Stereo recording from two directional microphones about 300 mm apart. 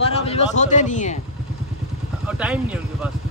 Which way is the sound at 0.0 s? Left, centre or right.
Centre.